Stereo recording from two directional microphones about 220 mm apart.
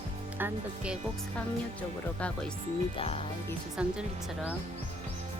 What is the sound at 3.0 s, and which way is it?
Music, 25° left (ahead or behind).